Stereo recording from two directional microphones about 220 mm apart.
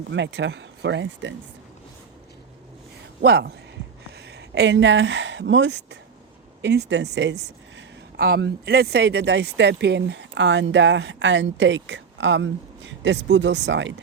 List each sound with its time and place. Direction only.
0.1 s speech: 50° right (ahead or behind)
3.2 s speech: 45° right (ahead or behind)